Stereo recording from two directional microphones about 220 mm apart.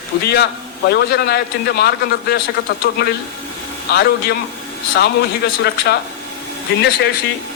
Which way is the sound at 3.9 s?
45° left (ahead or behind).